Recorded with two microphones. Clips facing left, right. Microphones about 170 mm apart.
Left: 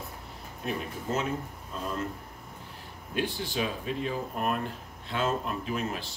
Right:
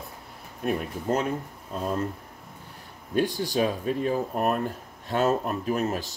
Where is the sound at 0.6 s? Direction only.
55° right (ahead or behind).